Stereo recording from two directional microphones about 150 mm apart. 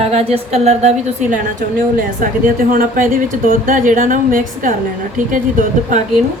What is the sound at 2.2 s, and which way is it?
Speech, 65° right (ahead or behind).